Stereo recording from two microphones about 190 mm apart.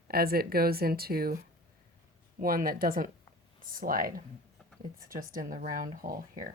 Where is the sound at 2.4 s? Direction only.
50° right (ahead or behind).